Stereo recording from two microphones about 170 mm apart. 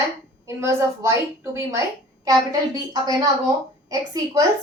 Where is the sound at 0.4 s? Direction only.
15° right (ahead or behind).